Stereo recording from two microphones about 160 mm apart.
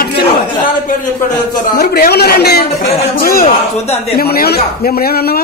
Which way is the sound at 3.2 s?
65° left (ahead or behind).